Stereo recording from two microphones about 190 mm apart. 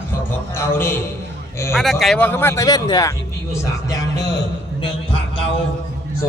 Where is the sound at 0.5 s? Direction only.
15° left (ahead or behind).